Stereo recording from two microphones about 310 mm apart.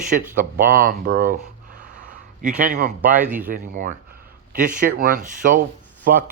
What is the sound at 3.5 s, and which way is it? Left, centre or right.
Speech, right.